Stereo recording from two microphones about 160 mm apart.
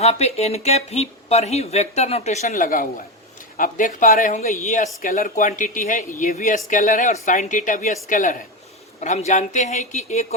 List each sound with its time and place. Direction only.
0.0 s speech: 40° left (ahead or behind)